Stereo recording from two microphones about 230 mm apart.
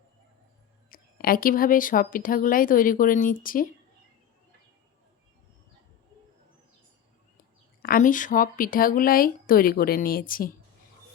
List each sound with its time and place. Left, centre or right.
0.9 s speech: left
7.8 s speech: left